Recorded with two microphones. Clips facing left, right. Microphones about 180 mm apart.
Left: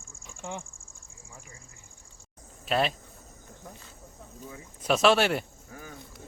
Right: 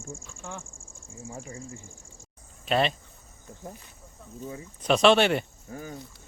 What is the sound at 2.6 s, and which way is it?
Speech, centre (ahead or behind).